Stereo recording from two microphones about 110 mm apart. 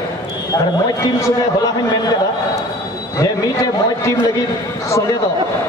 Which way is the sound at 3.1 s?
30° left (ahead or behind).